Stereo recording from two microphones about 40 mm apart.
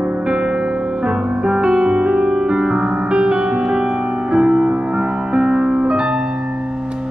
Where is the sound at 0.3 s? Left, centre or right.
Right.